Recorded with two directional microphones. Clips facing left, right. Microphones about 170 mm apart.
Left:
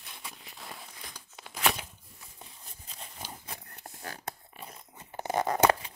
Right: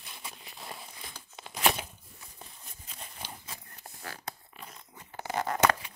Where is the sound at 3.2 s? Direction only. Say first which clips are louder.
Left 3 dB; 55° left (ahead or behind).